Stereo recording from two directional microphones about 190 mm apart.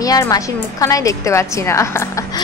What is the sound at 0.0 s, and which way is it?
A woman's voice, 20° left (ahead or behind).